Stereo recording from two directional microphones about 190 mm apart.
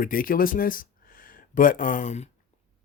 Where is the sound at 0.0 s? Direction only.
45° left (ahead or behind).